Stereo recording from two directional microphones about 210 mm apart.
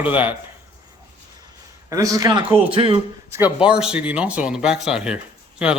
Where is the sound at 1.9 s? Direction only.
15° right (ahead or behind).